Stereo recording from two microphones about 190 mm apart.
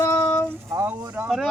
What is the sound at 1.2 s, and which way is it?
Speech, 5° right (ahead or behind).